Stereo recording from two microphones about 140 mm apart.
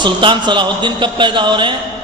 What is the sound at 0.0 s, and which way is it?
A man's voice, 35° right (ahead or behind).